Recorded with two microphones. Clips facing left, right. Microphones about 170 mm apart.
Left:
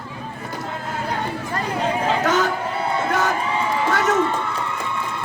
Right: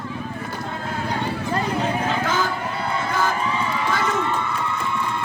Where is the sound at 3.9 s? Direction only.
75° left (ahead or behind).